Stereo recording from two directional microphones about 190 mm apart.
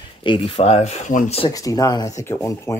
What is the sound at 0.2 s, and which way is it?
Speech, 25° left (ahead or behind).